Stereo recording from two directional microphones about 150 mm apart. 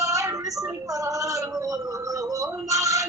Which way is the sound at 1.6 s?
25° right (ahead or behind).